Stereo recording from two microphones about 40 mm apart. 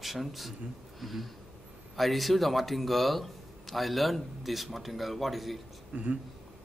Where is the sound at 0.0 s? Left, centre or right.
Centre.